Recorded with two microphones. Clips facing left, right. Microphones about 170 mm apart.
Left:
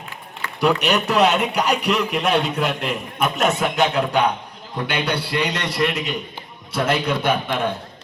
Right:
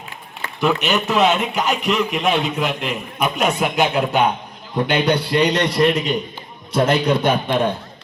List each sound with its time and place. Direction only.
0.8 s a man's voice: centre (ahead or behind)
3.6 s a man's voice: 20° right (ahead or behind)